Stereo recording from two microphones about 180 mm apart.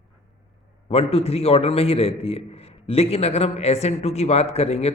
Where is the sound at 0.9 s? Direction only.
35° left (ahead or behind).